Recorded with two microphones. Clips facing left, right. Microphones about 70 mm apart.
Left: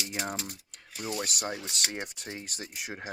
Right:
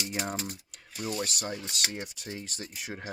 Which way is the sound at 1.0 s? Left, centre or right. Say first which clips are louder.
Right 1 dB; centre.